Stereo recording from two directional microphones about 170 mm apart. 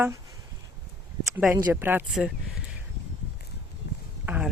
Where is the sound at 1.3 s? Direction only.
10° right (ahead or behind).